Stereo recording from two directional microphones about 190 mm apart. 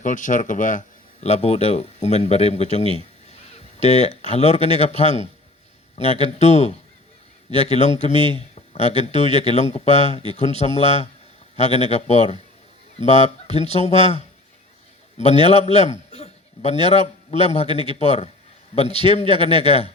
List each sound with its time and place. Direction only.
0.0 s a man's voice: 40° left (ahead or behind)
15.4 s a man's voice: 35° left (ahead or behind)